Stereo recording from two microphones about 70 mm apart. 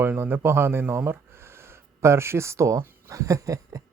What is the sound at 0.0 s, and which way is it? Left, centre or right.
Speech, right.